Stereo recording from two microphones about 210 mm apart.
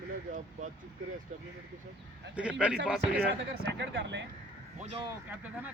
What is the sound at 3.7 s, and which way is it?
Speech, 60° right (ahead or behind).